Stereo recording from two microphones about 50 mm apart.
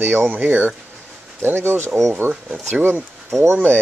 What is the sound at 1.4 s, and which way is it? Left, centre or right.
Speech, right.